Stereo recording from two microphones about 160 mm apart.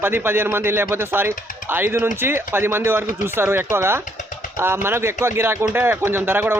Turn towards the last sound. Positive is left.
turn(degrees=-15)  # may be behind; listen again after turning